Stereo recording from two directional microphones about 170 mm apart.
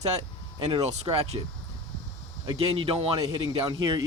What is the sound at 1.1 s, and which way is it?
Speech, 25° right (ahead or behind).